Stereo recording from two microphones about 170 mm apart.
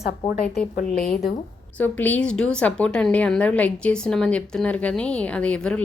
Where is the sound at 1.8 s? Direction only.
10° left (ahead or behind).